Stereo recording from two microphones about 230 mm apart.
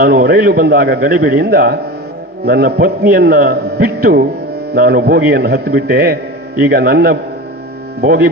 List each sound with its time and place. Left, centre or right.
0.0 s a man's voice: right